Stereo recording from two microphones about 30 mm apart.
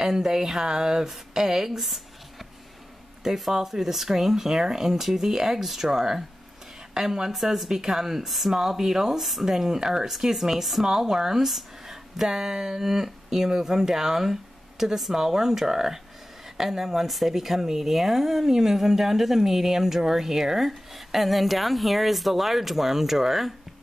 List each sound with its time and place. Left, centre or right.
0.0 s speech: centre
3.3 s speech: centre
7.2 s speech: centre